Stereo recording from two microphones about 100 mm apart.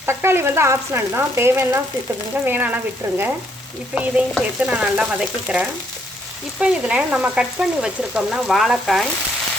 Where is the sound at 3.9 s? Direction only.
10° right (ahead or behind).